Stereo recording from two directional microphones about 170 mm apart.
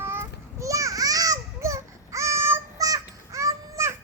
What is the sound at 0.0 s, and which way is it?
Children playing, 15° right (ahead or behind).